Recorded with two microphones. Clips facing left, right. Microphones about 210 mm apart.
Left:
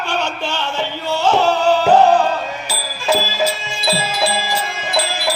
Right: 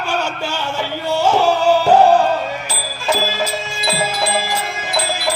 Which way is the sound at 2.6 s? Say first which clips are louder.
Left 1 dB; 5° left (ahead or behind).